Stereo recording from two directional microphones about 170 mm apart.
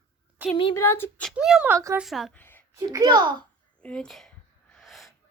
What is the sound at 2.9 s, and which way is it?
Speech, 20° right (ahead or behind).